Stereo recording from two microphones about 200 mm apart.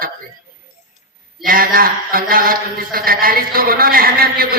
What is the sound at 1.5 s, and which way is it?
Mantra, 45° right (ahead or behind).